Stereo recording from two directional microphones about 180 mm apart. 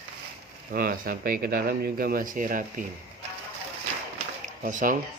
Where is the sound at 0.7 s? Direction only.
50° right (ahead or behind).